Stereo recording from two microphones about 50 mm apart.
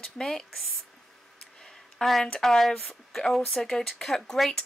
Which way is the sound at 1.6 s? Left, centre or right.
Centre.